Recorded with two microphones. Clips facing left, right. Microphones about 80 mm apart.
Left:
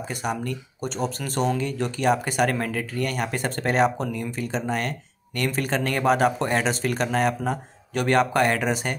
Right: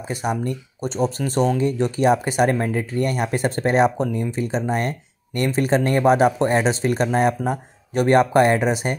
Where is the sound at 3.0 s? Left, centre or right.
Right.